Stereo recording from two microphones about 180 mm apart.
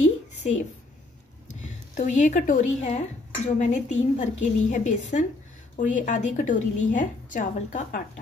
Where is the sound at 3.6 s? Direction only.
40° left (ahead or behind).